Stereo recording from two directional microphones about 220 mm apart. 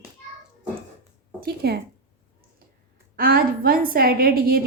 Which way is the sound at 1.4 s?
45° right (ahead or behind).